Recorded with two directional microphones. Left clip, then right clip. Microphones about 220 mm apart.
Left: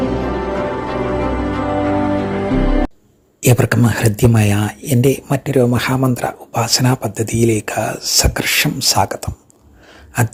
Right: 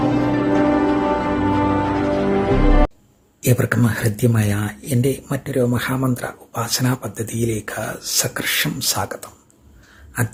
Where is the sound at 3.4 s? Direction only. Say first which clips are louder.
Left 4 dB; 30° left (ahead or behind).